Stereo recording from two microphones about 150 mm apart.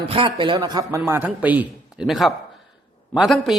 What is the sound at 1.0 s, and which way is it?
A man's voice, 15° right (ahead or behind).